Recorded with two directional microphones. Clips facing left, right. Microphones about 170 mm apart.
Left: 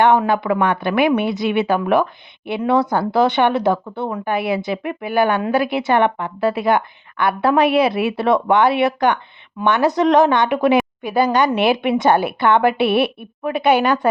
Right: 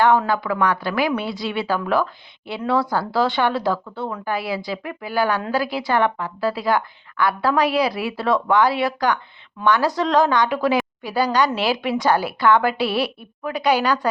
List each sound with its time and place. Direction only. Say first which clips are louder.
0.0 s a woman's voice: left 3 dB; 20° left (ahead or behind)